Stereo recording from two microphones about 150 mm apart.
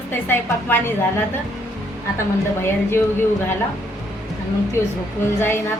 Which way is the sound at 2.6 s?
15° left (ahead or behind).